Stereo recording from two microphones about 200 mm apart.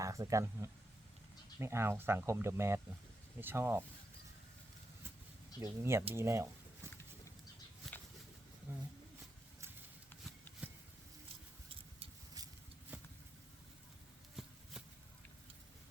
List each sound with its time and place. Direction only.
0.0 s speech: 15° right (ahead or behind)
5.5 s speech: 15° right (ahead or behind)
8.7 s speech: 10° right (ahead or behind)
11.7 s vehicle: 20° right (ahead or behind)
12.9 s vehicle: 5° right (ahead or behind)
14.4 s a sound: centre (ahead or behind)